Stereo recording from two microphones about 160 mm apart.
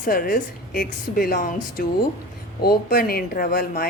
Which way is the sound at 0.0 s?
60° left (ahead or behind).